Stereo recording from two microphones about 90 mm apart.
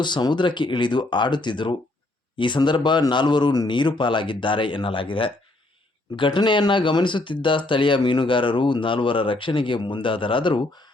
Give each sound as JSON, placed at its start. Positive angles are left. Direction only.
{"t": 0.0, "sound": "speech", "side_deg": 55}